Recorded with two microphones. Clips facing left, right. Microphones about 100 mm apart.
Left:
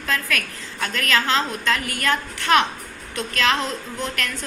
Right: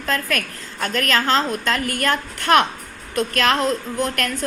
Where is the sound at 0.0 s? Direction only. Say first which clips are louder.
Right 2 dB; 40° right (ahead or behind).